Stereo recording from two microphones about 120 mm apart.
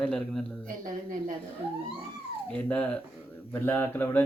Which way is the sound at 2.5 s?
10° left (ahead or behind).